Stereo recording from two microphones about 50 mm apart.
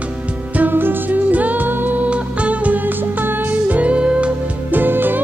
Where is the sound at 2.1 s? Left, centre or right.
Right.